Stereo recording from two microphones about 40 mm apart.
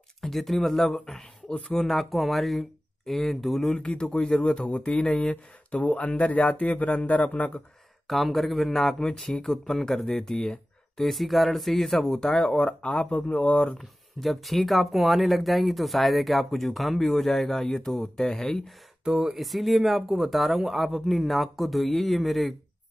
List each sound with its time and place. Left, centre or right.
0.2 s speech: centre
3.7 s speech: left
5.7 s a man's voice: left
8.1 s speech: centre
11.1 s speech: centre
12.4 s a man's voice: left
13.7 s speech: centre
19.0 s speech: centre